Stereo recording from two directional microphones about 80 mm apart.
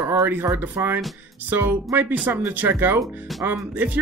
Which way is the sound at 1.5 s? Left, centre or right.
Right.